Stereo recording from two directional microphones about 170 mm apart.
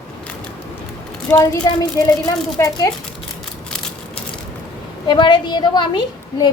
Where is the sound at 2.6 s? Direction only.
15° left (ahead or behind).